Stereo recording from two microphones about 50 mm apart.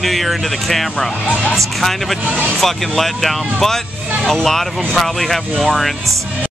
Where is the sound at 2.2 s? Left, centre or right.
Right.